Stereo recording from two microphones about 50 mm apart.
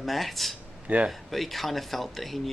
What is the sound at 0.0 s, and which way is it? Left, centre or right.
Speech, centre.